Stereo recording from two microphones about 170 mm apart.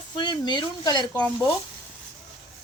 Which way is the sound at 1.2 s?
5° left (ahead or behind).